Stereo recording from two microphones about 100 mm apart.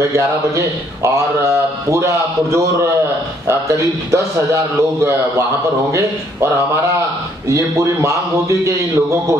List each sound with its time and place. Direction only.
0.1 s a man's voice: 30° right (ahead or behind)